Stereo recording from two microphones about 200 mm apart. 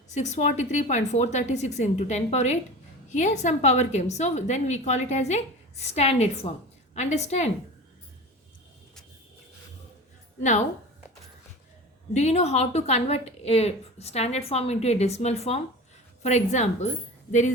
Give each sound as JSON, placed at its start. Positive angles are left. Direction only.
{"t": 0.1, "sound": "a woman's voice", "side_deg": 35}
{"t": 12.1, "sound": "a woman's voice", "side_deg": 35}